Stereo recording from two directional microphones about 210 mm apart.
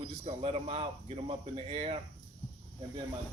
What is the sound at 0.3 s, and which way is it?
Speech, 25° right (ahead or behind).